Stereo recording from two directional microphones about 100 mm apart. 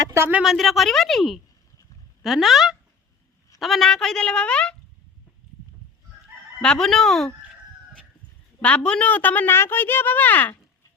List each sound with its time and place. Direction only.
0.0 s speech: 25° right (ahead or behind)
0.4 s a woman's voice: centre (ahead or behind)
6.6 s a woman's voice: 5° left (ahead or behind)
8.6 s speech: 10° left (ahead or behind)